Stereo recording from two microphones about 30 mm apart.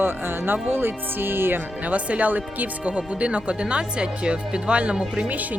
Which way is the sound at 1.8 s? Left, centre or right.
Right.